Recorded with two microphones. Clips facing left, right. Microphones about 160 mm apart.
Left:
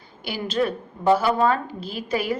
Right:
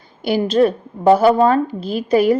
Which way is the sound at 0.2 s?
40° right (ahead or behind).